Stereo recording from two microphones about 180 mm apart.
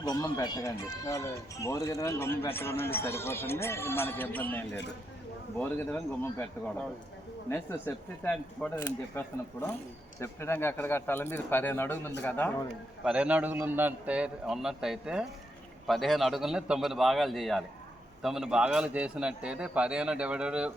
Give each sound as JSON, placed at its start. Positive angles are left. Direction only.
{"t": 0.0, "sound": "speech", "side_deg": 20}
{"t": 13.1, "sound": "a man's voice", "side_deg": -5}